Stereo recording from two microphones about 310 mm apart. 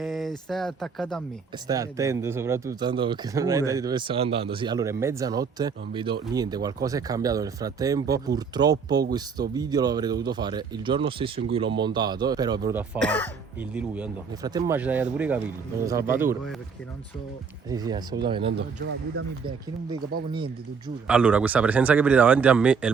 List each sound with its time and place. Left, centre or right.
0.0 s speech: centre
1.6 s speech: centre
17.7 s speech: centre
18.5 s speech: right
20.3 s speech: centre
21.1 s speech: centre